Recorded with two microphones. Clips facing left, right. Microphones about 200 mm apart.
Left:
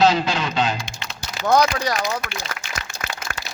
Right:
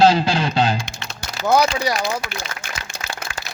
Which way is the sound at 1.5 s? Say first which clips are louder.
Right 1 dB; 10° right (ahead or behind).